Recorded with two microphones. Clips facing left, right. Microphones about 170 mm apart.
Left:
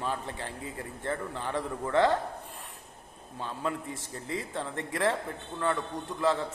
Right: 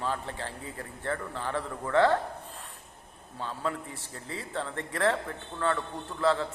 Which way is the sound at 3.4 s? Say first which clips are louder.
Even; 20° left (ahead or behind).